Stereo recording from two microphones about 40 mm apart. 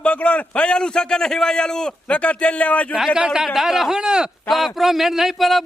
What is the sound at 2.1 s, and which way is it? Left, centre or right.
Speech, left.